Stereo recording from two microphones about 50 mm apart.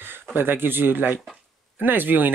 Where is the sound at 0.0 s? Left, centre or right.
Right.